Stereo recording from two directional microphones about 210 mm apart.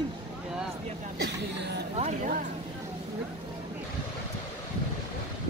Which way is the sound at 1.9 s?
30° right (ahead or behind).